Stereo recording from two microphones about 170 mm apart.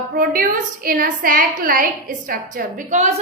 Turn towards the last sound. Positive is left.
turn(degrees=-45)  # may be behind; listen again after turning